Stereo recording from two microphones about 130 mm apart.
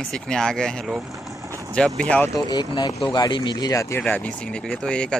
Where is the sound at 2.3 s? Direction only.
30° left (ahead or behind).